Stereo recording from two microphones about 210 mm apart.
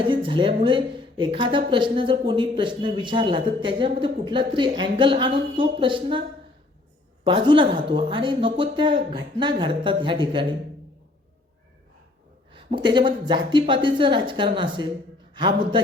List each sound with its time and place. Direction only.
0.1 s speech: 25° right (ahead or behind)
7.3 s speech: 25° right (ahead or behind)
12.5 s speech: 25° right (ahead or behind)